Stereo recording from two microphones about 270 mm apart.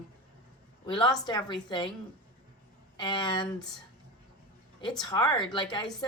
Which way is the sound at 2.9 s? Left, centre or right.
Centre.